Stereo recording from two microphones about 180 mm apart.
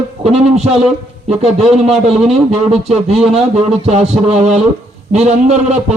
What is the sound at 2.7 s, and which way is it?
Speech, 35° right (ahead or behind).